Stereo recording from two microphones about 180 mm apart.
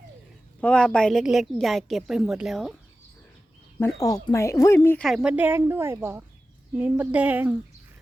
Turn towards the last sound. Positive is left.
turn(degrees=-10)  # may be behind; listen again after turning